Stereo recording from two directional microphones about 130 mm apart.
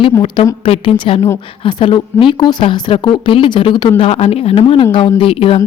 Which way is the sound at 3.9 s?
50° left (ahead or behind).